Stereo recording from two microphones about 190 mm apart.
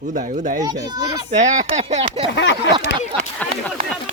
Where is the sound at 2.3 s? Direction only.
75° left (ahead or behind).